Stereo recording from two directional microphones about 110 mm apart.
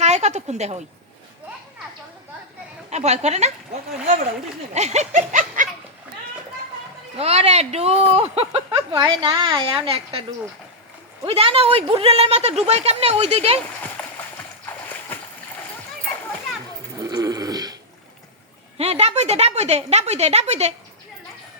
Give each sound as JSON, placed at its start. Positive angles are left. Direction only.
{"t": 0.0, "sound": "a woman's voice", "side_deg": -90}
{"t": 2.9, "sound": "a sound", "side_deg": -90}
{"t": 4.7, "sound": "a sound", "side_deg": -90}
{"t": 7.2, "sound": "a woman's voice", "side_deg": -70}
{"t": 8.9, "sound": "a woman's voice", "side_deg": -40}
{"t": 9.8, "sound": "a woman's voice", "side_deg": -60}
{"t": 11.3, "sound": "a woman's voice", "side_deg": -65}
{"t": 14.0, "sound": "splash", "side_deg": 10}
{"t": 17.0, "sound": "a sound", "side_deg": -35}
{"t": 18.8, "sound": "a woman's voice", "side_deg": -75}